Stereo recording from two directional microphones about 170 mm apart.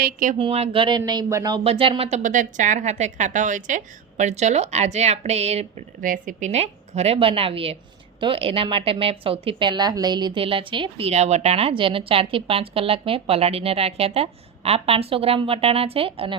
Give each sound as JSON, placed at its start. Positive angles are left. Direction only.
{"t": 0.0, "sound": "speech", "side_deg": -50}
{"t": 0.3, "sound": "speech", "side_deg": -35}
{"t": 1.6, "sound": "a woman's voice", "side_deg": -30}
{"t": 6.0, "sound": "a woman's voice", "side_deg": -50}